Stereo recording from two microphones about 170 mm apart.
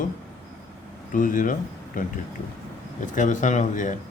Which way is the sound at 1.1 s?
50° left (ahead or behind).